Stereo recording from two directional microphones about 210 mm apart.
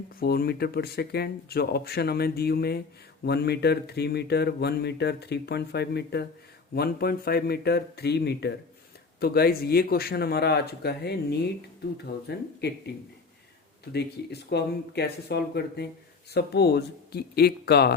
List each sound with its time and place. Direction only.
0.2 s speech: 45° left (ahead or behind)
13.9 s speech: 50° left (ahead or behind)